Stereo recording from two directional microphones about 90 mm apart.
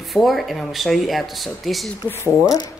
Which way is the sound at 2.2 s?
40° left (ahead or behind).